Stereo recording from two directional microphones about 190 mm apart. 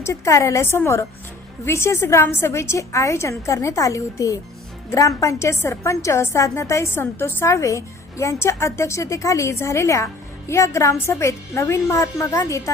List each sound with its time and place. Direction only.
0.0 s a woman's voice: 15° left (ahead or behind)